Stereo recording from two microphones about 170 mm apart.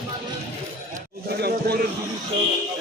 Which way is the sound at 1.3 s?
70° right (ahead or behind).